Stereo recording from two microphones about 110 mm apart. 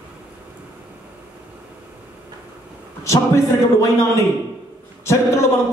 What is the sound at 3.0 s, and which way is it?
A man's voice, 30° left (ahead or behind).